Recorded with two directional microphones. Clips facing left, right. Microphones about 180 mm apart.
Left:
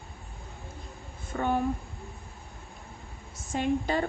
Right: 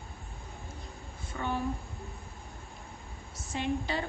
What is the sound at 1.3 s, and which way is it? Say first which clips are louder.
Speech: left 6 dB; 50° left (ahead or behind).